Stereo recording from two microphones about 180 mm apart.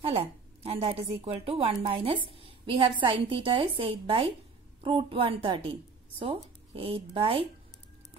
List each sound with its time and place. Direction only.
0.0 s a woman's voice: 35° right (ahead or behind)